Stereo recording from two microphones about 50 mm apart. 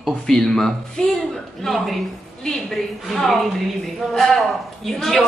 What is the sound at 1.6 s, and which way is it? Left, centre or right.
Speech, centre.